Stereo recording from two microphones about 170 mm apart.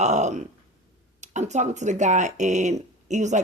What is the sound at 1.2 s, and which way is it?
Speech, 45° right (ahead or behind).